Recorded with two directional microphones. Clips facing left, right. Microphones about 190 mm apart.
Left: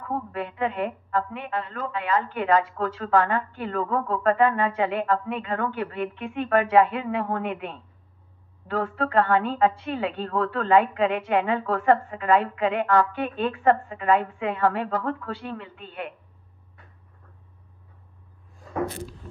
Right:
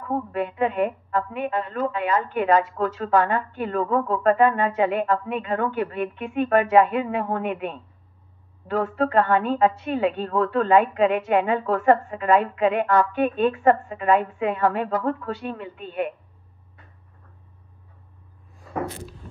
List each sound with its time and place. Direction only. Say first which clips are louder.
0.3 s a woman's voice: right 5 dB; 20° right (ahead or behind)